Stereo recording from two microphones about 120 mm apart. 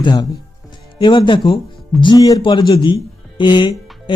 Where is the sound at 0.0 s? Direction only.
35° left (ahead or behind).